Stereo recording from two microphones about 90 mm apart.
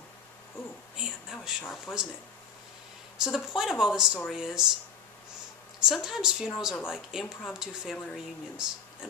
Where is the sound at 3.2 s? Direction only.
5° right (ahead or behind).